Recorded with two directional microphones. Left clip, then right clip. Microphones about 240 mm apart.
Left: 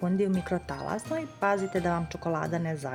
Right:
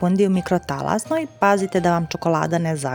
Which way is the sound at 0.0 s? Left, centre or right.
Right.